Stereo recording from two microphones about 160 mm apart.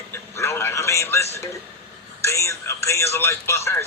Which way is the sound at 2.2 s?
15° left (ahead or behind).